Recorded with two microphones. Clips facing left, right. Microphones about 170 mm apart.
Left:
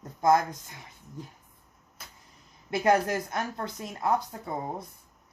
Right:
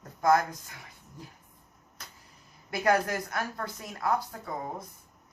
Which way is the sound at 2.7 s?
25° left (ahead or behind).